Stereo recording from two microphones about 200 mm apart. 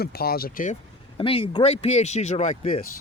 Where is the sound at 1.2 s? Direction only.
25° left (ahead or behind).